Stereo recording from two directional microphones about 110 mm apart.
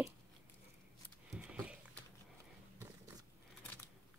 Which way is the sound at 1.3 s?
10° right (ahead or behind).